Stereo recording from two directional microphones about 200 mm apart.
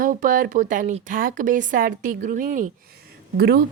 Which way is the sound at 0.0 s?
40° right (ahead or behind).